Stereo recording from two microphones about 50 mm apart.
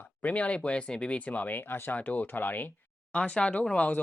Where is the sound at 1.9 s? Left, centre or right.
Left.